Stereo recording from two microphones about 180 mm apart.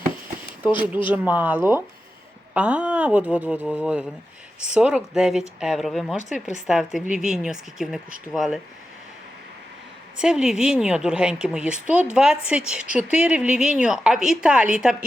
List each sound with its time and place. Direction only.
0.6 s speech: 25° left (ahead or behind)
1.0 s speech: 10° right (ahead or behind)
10.2 s speech: 5° right (ahead or behind)